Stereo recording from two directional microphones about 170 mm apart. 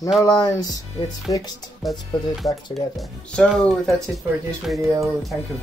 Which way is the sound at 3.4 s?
Centre (ahead or behind).